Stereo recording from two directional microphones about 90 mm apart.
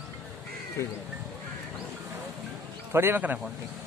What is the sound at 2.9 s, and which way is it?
Speech, 25° right (ahead or behind).